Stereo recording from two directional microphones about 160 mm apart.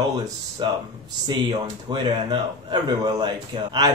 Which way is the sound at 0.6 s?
30° right (ahead or behind).